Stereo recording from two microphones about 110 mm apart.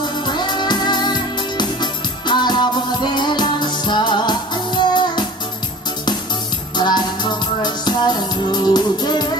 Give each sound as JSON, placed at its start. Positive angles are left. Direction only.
{"t": 0.3, "sound": "music", "side_deg": 45}
{"t": 6.8, "sound": "music", "side_deg": 40}